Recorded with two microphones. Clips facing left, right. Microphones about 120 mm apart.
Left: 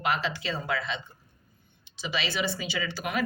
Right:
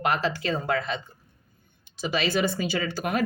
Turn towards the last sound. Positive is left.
turn(degrees=-45)  # may be behind; listen again after turning